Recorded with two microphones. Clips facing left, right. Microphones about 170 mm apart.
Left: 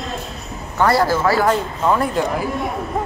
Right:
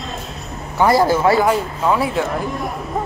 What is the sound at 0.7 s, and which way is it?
Speech, 15° right (ahead or behind).